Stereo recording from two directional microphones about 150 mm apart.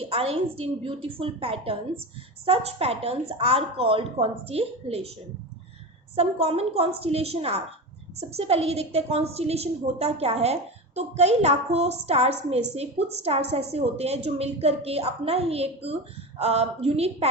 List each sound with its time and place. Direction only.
0.0 s a woman's voice: 40° right (ahead or behind)
6.1 s a woman's voice: 40° right (ahead or behind)